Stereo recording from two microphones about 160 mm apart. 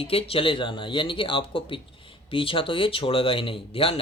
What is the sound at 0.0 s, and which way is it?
Speech, 35° left (ahead or behind).